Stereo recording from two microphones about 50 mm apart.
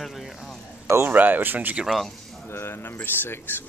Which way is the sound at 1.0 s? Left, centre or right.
Right.